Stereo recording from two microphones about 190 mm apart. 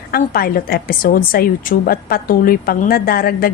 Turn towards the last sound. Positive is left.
turn(degrees=50)  # may be behind; listen again after turning